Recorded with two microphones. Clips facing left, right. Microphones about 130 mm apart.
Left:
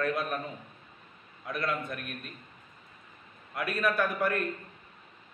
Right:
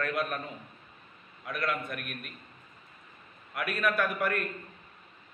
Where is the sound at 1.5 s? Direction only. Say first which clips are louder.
Even; 25° left (ahead or behind).